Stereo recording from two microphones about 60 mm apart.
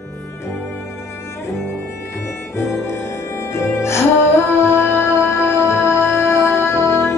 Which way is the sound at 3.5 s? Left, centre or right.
Left.